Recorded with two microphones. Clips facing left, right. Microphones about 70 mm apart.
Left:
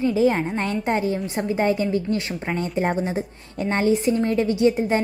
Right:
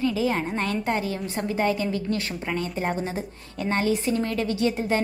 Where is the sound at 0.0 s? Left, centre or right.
Left.